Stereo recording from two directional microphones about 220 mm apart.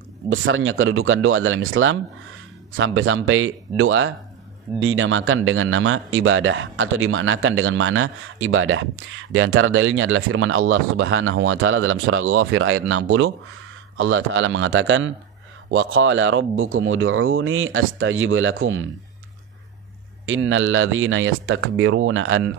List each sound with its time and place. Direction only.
0.3 s speech: 60° right (ahead or behind)
20.2 s speech: 65° right (ahead or behind)